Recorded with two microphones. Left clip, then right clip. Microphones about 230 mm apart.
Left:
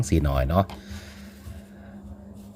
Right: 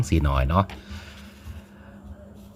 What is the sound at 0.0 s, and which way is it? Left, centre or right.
Speech, centre.